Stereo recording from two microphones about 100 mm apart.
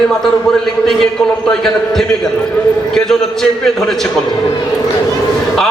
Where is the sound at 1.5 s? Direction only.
5° left (ahead or behind).